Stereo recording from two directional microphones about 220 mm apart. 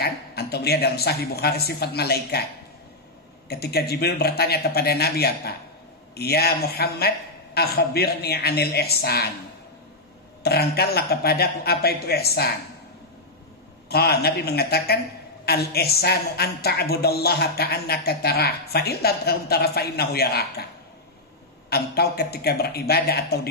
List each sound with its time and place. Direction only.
0.0 s a woman's voice: 45° left (ahead or behind)
3.4 s a woman's voice: 45° left (ahead or behind)
10.4 s a woman's voice: 45° left (ahead or behind)
13.8 s a woman's voice: 45° left (ahead or behind)
21.6 s a woman's voice: 45° left (ahead or behind)